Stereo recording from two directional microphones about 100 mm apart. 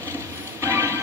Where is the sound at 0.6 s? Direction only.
30° right (ahead or behind).